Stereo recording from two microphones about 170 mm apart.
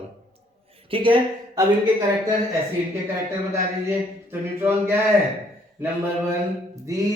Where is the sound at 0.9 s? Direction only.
30° right (ahead or behind).